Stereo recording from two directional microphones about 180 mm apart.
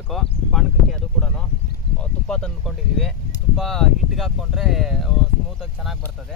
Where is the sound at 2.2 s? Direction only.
5° left (ahead or behind).